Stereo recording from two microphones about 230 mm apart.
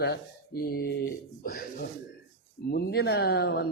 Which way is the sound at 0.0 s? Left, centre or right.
Left.